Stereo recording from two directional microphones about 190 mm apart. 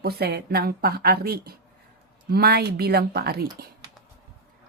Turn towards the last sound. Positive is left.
turn(degrees=-55)  # may be behind; listen again after turning